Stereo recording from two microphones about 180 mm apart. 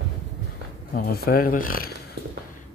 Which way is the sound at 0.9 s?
55° left (ahead or behind).